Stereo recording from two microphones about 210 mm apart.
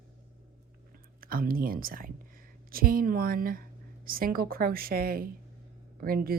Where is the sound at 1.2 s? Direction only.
45° right (ahead or behind).